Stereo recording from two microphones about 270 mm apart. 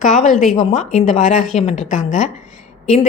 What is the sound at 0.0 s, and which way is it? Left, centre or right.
A woman's voice, left.